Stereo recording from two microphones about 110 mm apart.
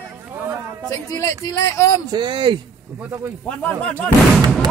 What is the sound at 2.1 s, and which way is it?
Speech, 45° right (ahead or behind).